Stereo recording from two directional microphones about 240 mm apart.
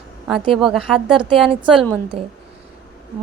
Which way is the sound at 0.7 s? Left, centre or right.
Centre.